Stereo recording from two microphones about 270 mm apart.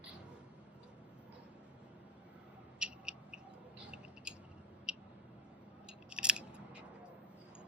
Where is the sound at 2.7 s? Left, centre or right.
Centre.